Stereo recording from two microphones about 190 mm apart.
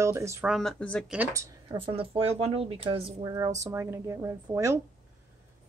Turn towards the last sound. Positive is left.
turn(degrees=-15)  # may be behind; listen again after turning